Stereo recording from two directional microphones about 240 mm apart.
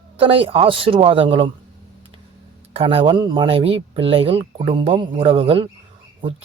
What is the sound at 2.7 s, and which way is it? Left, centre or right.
Speech, right.